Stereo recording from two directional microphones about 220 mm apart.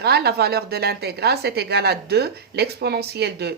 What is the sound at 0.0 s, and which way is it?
A woman's voice, 45° right (ahead or behind).